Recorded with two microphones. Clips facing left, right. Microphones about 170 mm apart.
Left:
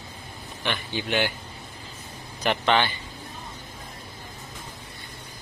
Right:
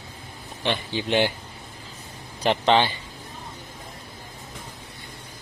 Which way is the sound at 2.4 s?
25° right (ahead or behind).